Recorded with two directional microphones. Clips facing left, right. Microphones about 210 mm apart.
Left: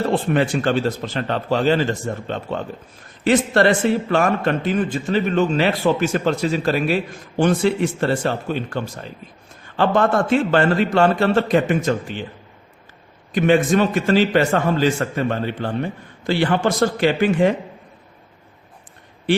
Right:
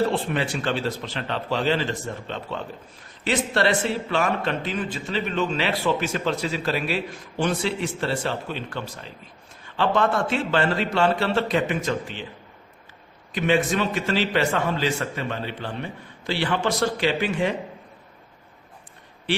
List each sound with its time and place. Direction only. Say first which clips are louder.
0.1 s a man's voice: left 7 dB; 50° left (ahead or behind)
13.3 s a man's voice: left 6 dB; 50° left (ahead or behind)